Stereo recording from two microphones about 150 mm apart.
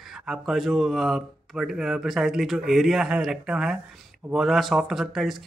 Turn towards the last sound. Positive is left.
turn(degrees=0)  # may be behind; listen again after turning